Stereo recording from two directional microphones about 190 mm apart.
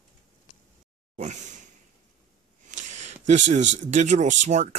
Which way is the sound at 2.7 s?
40° right (ahead or behind).